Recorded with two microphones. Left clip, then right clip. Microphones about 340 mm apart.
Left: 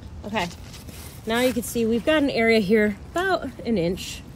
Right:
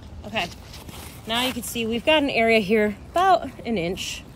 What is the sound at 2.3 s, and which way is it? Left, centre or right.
Speech, centre.